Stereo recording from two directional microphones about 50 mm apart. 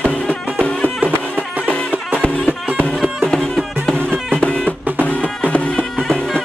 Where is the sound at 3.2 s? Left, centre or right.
Centre.